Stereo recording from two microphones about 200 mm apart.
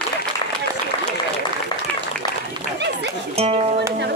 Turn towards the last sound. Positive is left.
turn(degrees=-30)  # may be behind; listen again after turning